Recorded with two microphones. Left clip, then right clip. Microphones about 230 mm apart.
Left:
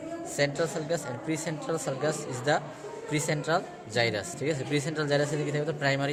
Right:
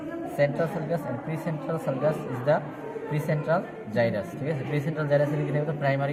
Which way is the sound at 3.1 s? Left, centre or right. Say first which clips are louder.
Right 1 dB; left.